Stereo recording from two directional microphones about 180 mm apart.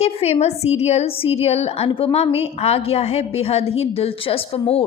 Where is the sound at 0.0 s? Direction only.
35° left (ahead or behind).